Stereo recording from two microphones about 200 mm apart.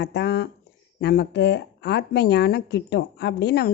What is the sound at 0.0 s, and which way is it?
Speech, 60° left (ahead or behind).